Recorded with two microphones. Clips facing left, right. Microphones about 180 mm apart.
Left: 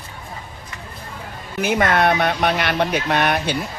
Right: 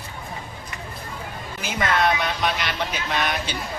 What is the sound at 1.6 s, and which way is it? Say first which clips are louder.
Speech: left 5 dB; 55° left (ahead or behind).